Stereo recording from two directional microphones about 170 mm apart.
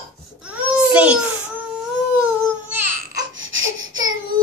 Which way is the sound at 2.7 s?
10° right (ahead or behind).